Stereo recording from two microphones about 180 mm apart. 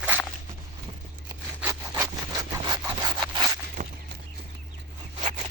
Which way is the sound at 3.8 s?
45° right (ahead or behind).